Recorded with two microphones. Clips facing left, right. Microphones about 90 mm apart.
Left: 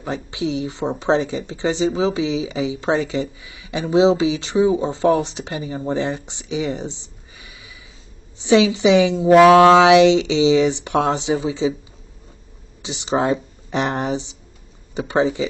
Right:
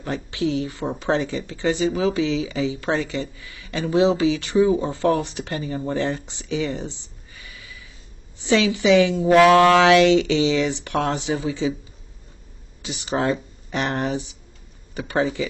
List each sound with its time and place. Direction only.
0.0 s speech: 20° left (ahead or behind)
12.8 s speech: 20° left (ahead or behind)